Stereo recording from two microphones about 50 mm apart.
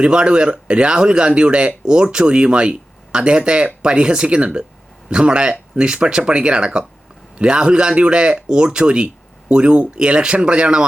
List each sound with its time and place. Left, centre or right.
0.0 s speech: centre